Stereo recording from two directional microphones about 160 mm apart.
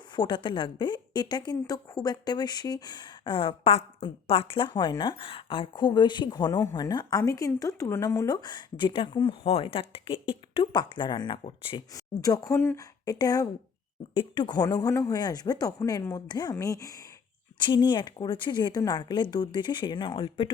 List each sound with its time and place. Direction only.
0.2 s speech: 30° left (ahead or behind)